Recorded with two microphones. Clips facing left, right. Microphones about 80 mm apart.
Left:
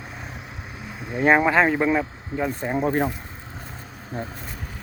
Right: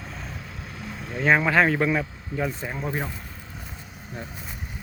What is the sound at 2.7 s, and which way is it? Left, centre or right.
Speech, left.